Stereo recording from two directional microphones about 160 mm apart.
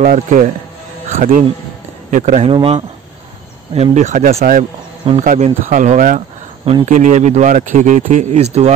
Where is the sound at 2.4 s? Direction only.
35° right (ahead or behind).